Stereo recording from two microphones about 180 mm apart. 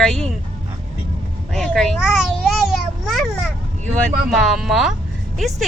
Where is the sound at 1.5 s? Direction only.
5° left (ahead or behind).